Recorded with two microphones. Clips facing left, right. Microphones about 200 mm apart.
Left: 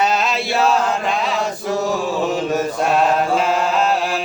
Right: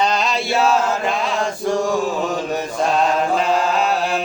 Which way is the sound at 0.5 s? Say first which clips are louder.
Even; centre (ahead or behind).